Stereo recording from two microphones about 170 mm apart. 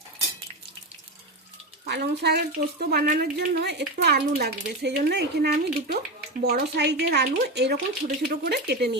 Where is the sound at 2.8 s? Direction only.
60° right (ahead or behind); by 9.0 s 75° right (ahead or behind).